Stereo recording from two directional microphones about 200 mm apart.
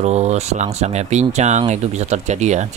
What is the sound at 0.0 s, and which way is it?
Speech, 35° right (ahead or behind).